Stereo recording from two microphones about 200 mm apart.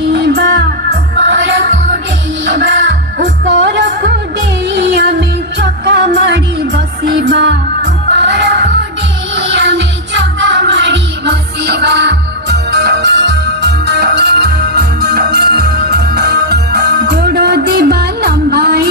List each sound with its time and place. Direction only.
0.1 s music: 60° right (ahead or behind)